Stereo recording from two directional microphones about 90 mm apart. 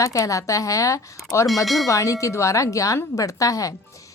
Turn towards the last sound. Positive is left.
turn(degrees=40)  # may be behind; listen again after turning